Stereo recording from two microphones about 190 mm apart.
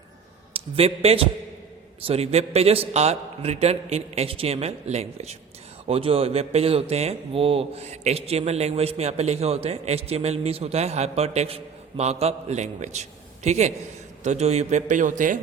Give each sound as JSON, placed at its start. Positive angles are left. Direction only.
{"t": 0.5, "sound": "a man's voice", "side_deg": -30}